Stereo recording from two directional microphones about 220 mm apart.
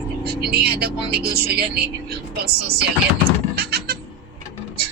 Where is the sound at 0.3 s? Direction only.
45° right (ahead or behind).